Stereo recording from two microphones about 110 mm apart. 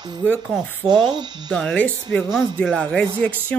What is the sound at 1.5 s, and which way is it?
Speech, 5° left (ahead or behind).